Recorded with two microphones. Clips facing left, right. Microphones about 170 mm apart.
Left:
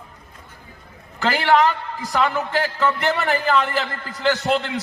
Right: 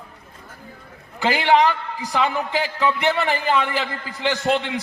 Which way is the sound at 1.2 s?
15° right (ahead or behind).